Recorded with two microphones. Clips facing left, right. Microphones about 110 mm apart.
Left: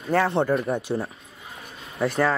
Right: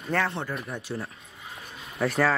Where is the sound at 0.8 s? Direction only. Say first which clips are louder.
Left 7 dB; 15° left (ahead or behind).